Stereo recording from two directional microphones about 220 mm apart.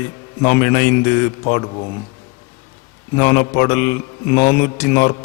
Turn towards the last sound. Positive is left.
turn(degrees=10)  # may be behind; listen again after turning